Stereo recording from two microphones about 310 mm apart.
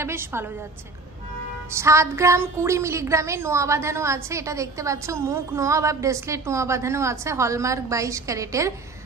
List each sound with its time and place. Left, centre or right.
0.0 s a woman's voice: centre
1.7 s a woman's voice: centre